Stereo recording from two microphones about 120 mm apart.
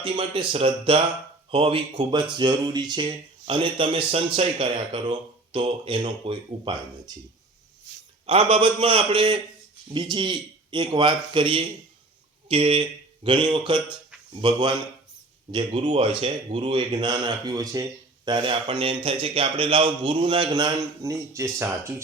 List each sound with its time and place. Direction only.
0.0 s a man's voice: 45° right (ahead or behind)
8.3 s a man's voice: 50° right (ahead or behind)
13.2 s a man's voice: 40° right (ahead or behind)
18.3 s speech: 40° right (ahead or behind); by 22.0 s 25° right (ahead or behind)